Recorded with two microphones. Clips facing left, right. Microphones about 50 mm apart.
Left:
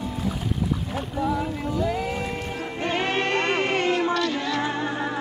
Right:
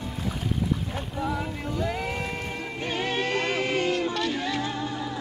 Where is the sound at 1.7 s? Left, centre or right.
Centre.